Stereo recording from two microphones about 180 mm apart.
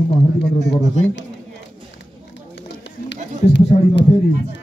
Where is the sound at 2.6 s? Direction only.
75° left (ahead or behind).